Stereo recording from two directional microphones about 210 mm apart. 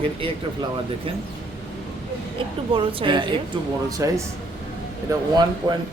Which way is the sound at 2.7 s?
25° right (ahead or behind).